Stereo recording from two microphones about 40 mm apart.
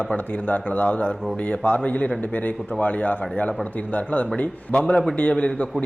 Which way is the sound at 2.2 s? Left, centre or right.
Left.